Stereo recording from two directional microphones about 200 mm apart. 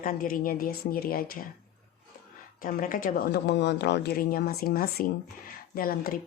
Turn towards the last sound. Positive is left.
turn(degrees=45)  # may be behind; listen again after turning